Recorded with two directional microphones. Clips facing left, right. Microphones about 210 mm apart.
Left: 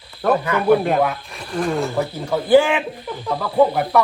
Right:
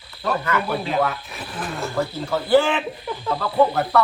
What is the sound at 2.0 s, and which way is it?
Speech, 15° left (ahead or behind).